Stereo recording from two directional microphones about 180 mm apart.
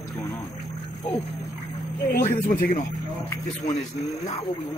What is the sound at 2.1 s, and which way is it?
Speech, 50° left (ahead or behind).